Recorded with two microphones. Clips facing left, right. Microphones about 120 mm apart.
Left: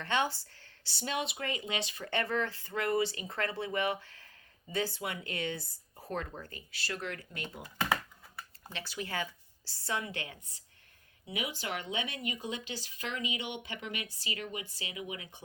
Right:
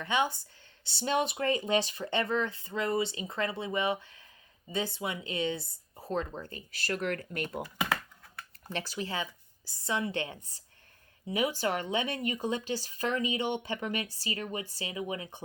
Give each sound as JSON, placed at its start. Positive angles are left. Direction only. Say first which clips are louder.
{"t": 0.0, "sound": "speech", "louder": "right 2 dB", "side_deg": -15}
{"t": 2.0, "sound": "speech", "louder": "right 3 dB", "side_deg": -20}
{"t": 6.7, "sound": "speech", "louder": "right 7 dB", "side_deg": -45}
{"t": 8.7, "sound": "speech", "louder": "right 5 dB", "side_deg": -40}
{"t": 9.0, "sound": "a woman's voice", "louder": "right 1 dB", "side_deg": -20}
{"t": 11.3, "sound": "speech", "louder": "right 8 dB", "side_deg": -40}